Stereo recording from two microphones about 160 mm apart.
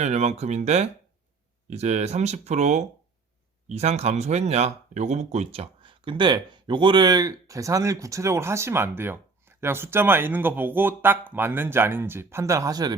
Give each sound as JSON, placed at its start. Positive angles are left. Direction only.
{"t": 0.0, "sound": "speech", "side_deg": -45}